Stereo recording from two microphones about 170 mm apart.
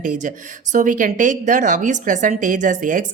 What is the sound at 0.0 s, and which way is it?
A woman's voice, 45° right (ahead or behind).